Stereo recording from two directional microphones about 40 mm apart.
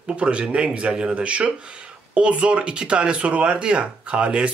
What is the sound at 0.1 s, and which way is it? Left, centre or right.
Speech, right.